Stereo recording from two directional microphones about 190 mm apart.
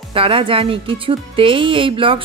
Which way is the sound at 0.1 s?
30° right (ahead or behind).